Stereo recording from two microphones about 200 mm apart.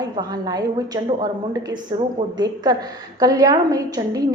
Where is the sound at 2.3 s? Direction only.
20° right (ahead or behind).